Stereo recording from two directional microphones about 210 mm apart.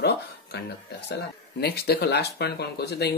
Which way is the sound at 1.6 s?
50° left (ahead or behind).